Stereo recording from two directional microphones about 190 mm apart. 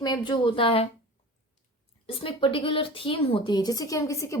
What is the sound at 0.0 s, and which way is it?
Speech, 25° left (ahead or behind).